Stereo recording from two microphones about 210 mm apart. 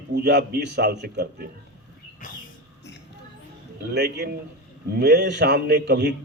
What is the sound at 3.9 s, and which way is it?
A man's voice, 50° right (ahead or behind).